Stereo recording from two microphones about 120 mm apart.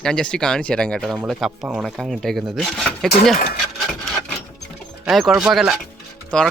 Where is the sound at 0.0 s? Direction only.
5° left (ahead or behind).